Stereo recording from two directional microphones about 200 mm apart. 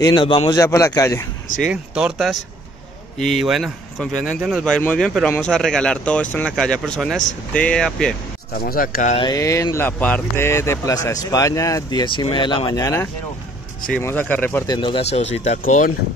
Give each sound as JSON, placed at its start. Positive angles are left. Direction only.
{"t": 0.0, "sound": "speech", "side_deg": 20}
{"t": 1.6, "sound": "speech", "side_deg": -5}
{"t": 8.5, "sound": "speech", "side_deg": 45}
{"t": 9.1, "sound": "speech", "side_deg": 20}
{"t": 14.7, "sound": "speech", "side_deg": 25}